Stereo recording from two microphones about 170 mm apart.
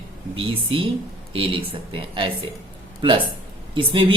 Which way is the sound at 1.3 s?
30° right (ahead or behind).